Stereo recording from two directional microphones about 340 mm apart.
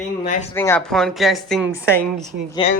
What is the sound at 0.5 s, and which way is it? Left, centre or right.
A woman's voice, centre.